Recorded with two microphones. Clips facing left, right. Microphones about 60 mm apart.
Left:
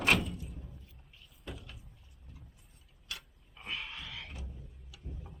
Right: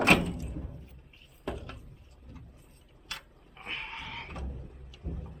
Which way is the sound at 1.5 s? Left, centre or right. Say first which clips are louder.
Right 9 dB; right.